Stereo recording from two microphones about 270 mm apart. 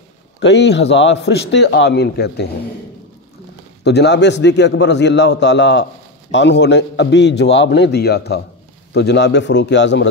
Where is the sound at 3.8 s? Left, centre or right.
Left.